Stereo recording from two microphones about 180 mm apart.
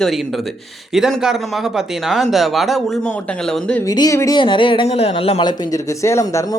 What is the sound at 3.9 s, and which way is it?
Speech, 20° left (ahead or behind).